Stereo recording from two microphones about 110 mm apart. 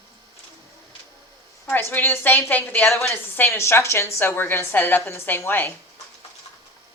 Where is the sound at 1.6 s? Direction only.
20° left (ahead or behind).